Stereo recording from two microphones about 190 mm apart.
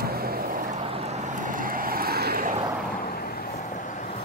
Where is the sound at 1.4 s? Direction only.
45° right (ahead or behind).